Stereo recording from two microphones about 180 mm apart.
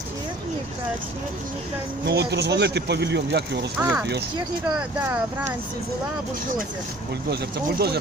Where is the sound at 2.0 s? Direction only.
65° right (ahead or behind).